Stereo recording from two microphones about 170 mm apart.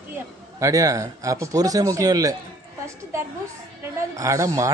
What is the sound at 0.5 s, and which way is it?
Speech, 20° right (ahead or behind).